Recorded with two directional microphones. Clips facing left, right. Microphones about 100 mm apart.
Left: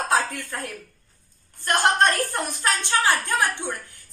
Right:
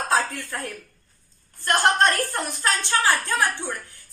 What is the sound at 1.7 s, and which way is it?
A woman's voice, 20° left (ahead or behind).